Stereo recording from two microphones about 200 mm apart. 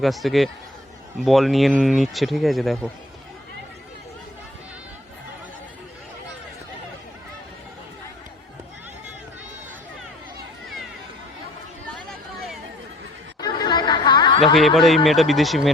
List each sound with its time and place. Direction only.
0.0 s speech: centre (ahead or behind)
13.4 s chatter: 20° left (ahead or behind)
14.8 s speech: centre (ahead or behind)